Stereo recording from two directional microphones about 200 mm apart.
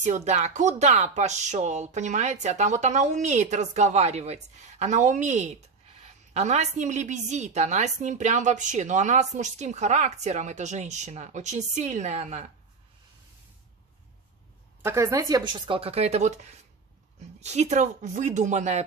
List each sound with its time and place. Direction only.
0.0 s a woman's voice: 35° right (ahead or behind)
14.8 s a woman's voice: 15° right (ahead or behind); by 18.9 s 35° right (ahead or behind)